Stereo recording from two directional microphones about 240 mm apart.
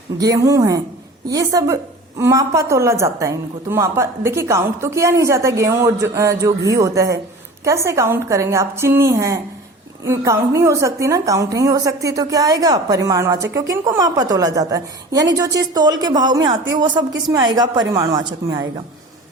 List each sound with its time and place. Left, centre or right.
0.2 s a woman's voice: centre